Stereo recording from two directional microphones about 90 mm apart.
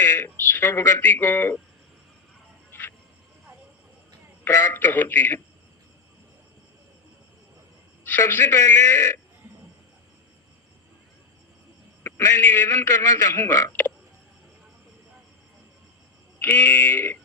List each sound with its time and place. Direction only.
0.0 s speech: 25° left (ahead or behind)
2.7 s music: 20° left (ahead or behind)
4.4 s a man's voice: 30° left (ahead or behind)
8.3 s a man's voice: 25° left (ahead or behind)
12.0 s a man's voice: 30° left (ahead or behind)
16.4 s a man's voice: 25° left (ahead or behind)